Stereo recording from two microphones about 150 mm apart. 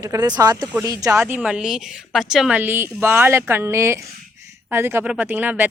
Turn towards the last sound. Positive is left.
turn(degrees=-10)  # may be behind; listen again after turning